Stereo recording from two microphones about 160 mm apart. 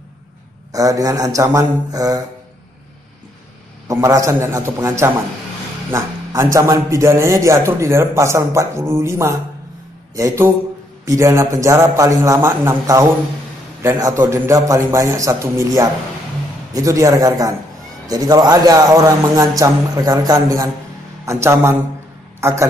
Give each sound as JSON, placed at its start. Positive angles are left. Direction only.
{"t": 0.7, "sound": "a man's voice", "side_deg": -20}
{"t": 3.9, "sound": "a man's voice", "side_deg": -20}